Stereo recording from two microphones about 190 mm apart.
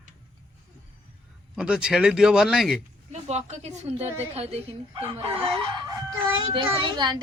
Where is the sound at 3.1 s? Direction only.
35° right (ahead or behind).